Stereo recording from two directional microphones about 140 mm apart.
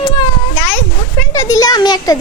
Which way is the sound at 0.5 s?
15° left (ahead or behind).